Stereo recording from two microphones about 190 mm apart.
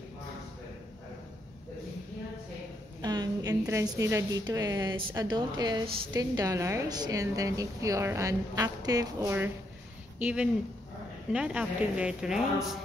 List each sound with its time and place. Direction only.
3.0 s a woman's voice: 20° right (ahead or behind); by 12.7 s centre (ahead or behind)